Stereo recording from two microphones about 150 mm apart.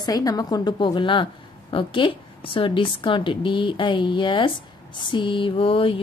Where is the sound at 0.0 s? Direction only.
25° left (ahead or behind).